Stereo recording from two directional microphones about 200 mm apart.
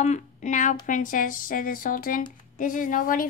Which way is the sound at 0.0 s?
35° left (ahead or behind).